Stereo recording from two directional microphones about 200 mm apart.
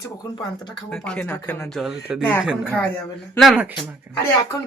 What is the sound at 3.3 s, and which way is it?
Speech, 5° left (ahead or behind).